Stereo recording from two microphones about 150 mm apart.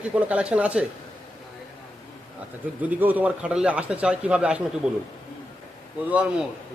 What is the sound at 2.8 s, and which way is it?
A man's voice, 10° right (ahead or behind).